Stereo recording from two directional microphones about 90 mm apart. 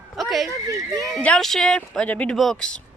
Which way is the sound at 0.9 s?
40° right (ahead or behind).